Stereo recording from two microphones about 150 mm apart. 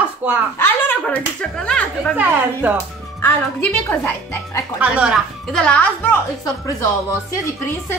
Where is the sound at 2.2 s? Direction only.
10° right (ahead or behind).